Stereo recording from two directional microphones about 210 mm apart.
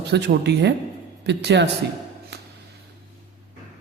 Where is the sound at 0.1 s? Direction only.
55° right (ahead or behind).